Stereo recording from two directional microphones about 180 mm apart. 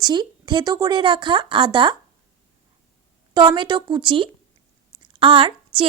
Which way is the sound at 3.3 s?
25° right (ahead or behind).